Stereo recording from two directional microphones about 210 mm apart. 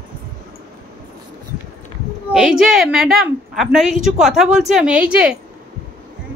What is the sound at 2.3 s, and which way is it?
A woman's voice, centre (ahead or behind).